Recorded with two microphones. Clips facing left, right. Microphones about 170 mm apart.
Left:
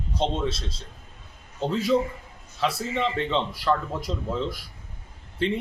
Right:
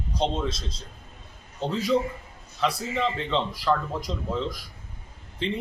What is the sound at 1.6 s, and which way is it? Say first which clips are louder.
A man's voice: left 1 dB; 5° left (ahead or behind).